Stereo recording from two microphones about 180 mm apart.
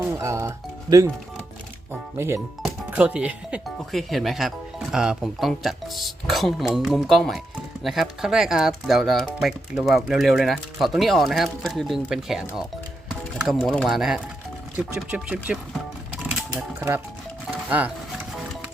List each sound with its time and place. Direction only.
0.0 s music: 15° right (ahead or behind)
2.6 s speech: 5° right (ahead or behind)
16.6 s speech: 10° right (ahead or behind)